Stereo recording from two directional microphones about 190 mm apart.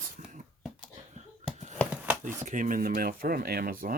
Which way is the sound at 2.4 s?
45° right (ahead or behind).